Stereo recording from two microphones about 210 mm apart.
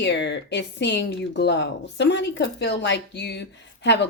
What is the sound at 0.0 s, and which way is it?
Speech, 55° left (ahead or behind).